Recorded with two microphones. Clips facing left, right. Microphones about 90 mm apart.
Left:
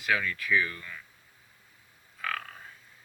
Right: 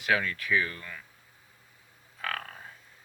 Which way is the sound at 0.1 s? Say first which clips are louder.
Right 1 dB; 45° right (ahead or behind).